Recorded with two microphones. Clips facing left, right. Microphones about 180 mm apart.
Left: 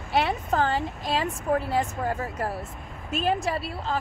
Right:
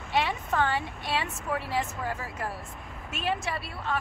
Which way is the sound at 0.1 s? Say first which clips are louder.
Left 3 dB; 35° left (ahead or behind).